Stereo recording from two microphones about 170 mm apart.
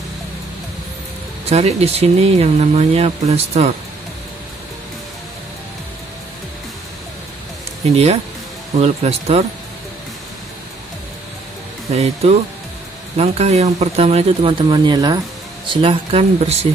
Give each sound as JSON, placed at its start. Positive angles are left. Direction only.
{"t": 1.5, "sound": "speech", "side_deg": -40}
{"t": 7.9, "sound": "speech", "side_deg": -35}
{"t": 11.9, "sound": "speech", "side_deg": -40}